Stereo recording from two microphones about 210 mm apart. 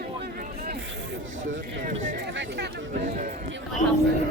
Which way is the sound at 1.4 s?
35° right (ahead or behind).